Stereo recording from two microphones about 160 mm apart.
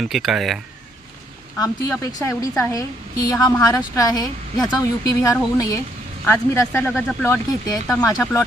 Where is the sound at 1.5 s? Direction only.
20° left (ahead or behind).